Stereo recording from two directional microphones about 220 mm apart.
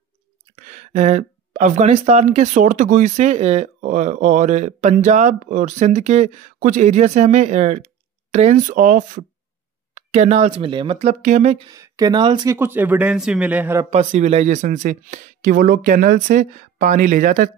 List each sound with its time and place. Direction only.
0.6 s speech: 35° right (ahead or behind)
11.6 s speech: 15° right (ahead or behind)
13.8 s speech: 30° right (ahead or behind)